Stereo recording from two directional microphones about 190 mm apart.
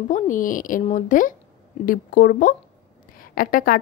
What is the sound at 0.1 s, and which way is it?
A woman's voice, 45° left (ahead or behind).